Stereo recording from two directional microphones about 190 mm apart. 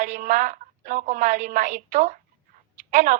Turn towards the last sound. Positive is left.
turn(degrees=-40)  # may be behind; listen again after turning